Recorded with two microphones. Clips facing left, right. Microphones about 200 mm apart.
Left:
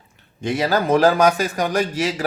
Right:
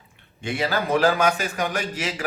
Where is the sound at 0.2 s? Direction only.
40° left (ahead or behind).